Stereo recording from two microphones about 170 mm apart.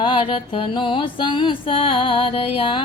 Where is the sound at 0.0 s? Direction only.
30° left (ahead or behind).